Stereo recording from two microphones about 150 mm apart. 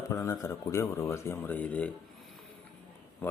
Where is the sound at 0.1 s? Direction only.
20° left (ahead or behind).